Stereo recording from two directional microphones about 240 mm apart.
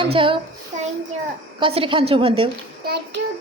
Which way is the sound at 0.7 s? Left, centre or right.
Right.